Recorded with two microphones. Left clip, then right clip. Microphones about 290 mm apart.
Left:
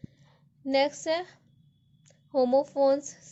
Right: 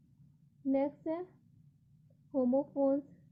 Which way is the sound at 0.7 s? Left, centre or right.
Centre.